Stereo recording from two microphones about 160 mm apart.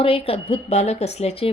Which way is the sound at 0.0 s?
35° left (ahead or behind).